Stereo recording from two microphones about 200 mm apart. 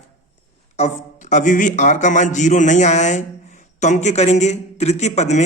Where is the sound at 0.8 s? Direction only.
35° left (ahead or behind).